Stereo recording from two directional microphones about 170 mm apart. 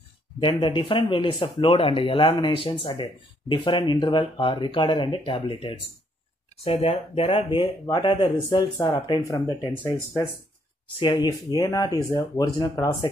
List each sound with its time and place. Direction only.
0.4 s speech: 30° left (ahead or behind)
11.2 s speech: 20° left (ahead or behind)